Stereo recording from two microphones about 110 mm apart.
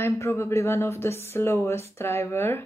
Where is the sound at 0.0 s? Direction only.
25° left (ahead or behind).